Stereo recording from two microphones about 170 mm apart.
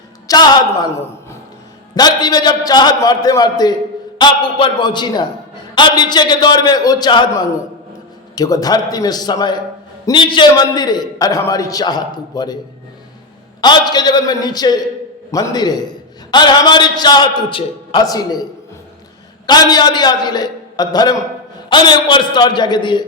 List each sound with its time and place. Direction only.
0.3 s a woman's voice: 20° left (ahead or behind)
13.6 s a man's voice: 25° left (ahead or behind)
19.5 s a man's voice: 25° left (ahead or behind)